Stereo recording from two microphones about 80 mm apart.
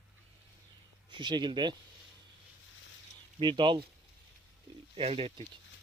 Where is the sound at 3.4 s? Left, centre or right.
Right.